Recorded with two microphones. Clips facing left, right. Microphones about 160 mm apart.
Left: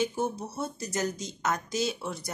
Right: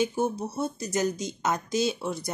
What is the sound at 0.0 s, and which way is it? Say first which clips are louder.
A woman's voice: right 3 dB; 15° right (ahead or behind).